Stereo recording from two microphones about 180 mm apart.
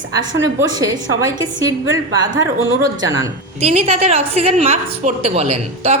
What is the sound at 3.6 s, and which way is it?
A woman's voice, 35° right (ahead or behind).